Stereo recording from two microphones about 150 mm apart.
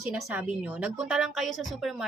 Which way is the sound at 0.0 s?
5° right (ahead or behind).